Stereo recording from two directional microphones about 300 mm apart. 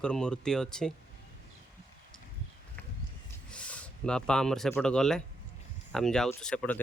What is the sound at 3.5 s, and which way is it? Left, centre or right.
Speech, centre.